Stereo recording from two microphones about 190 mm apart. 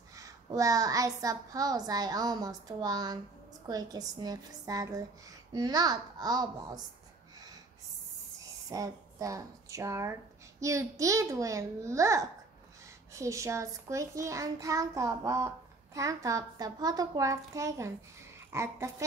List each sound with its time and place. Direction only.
0.1 s a woman's voice: 15° right (ahead or behind)
8.6 s a child's voice: 20° right (ahead or behind)